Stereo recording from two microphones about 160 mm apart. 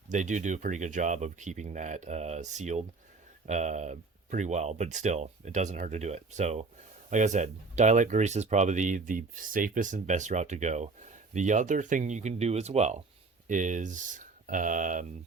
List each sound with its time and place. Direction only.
0.1 s speech: 50° right (ahead or behind)